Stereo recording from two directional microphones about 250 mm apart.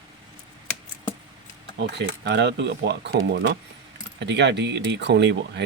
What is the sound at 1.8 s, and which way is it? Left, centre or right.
Speech, right.